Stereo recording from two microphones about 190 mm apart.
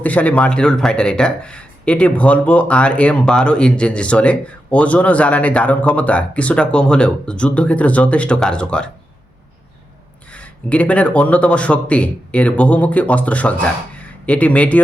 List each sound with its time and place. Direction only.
0.0 s speech: 10° left (ahead or behind)
10.3 s speech: 5° left (ahead or behind)